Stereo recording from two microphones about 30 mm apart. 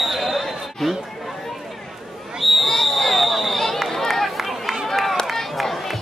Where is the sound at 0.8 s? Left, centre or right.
Centre.